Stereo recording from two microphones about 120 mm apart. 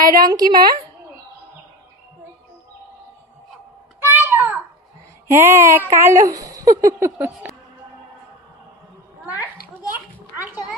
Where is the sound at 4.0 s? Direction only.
15° right (ahead or behind).